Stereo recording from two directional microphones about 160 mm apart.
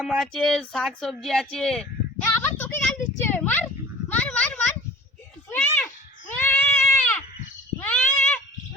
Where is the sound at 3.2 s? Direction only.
10° left (ahead or behind).